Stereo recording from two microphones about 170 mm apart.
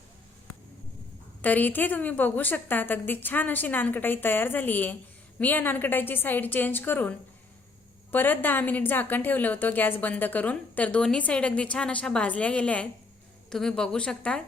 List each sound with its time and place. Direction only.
1.4 s a woman's voice: 10° left (ahead or behind)